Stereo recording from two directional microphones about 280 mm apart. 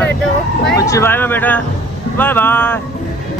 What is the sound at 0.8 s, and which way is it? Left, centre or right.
Speech, centre.